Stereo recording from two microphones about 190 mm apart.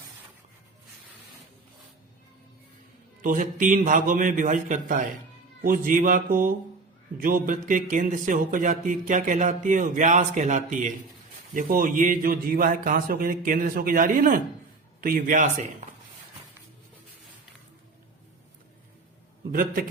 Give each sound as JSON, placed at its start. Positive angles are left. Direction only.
{"t": 3.2, "sound": "speech", "side_deg": -45}
{"t": 19.5, "sound": "speech", "side_deg": -50}